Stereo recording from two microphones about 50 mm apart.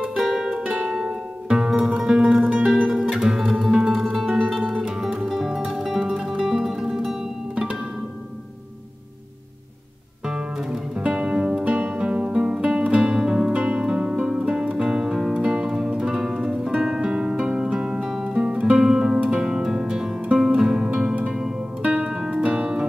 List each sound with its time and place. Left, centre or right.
0.2 s music: centre
4.4 s music: centre
7.5 s music: right
10.2 s music: centre
21.8 s music: right